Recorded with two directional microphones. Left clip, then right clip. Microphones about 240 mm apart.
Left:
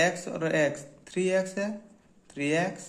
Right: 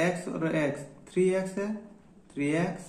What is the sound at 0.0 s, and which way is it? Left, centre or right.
A man's voice, left.